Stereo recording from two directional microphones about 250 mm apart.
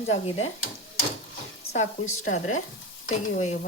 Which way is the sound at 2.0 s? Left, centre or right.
Left.